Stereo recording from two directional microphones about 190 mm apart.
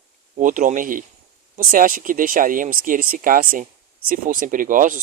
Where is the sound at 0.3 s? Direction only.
45° right (ahead or behind).